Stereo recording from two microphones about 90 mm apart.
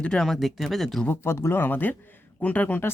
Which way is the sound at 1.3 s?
30° left (ahead or behind).